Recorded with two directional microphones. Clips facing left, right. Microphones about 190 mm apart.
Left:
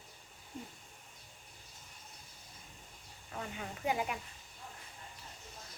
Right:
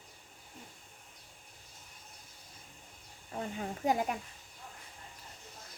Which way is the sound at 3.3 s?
35° right (ahead or behind).